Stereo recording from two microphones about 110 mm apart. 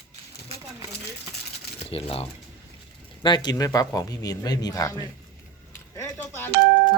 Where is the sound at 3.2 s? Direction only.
40° left (ahead or behind).